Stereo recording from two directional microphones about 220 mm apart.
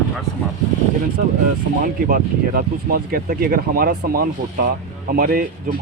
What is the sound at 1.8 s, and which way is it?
Speech, 40° right (ahead or behind).